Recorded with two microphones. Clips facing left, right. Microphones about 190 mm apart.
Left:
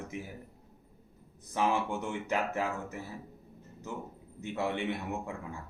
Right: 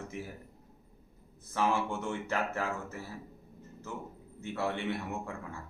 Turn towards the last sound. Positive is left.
turn(degrees=15)  # may be behind; listen again after turning